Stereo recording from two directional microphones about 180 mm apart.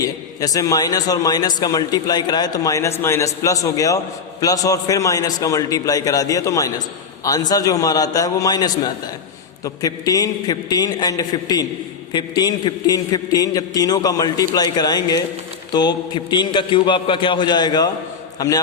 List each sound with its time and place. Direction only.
0.0 s a man's voice: 20° left (ahead or behind)